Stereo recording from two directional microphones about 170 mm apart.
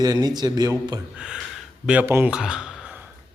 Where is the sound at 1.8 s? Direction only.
10° right (ahead or behind).